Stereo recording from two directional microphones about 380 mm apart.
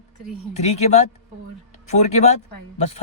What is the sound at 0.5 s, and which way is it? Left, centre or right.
Speech, centre.